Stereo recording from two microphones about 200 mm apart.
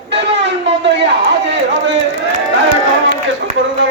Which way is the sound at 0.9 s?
60° right (ahead or behind).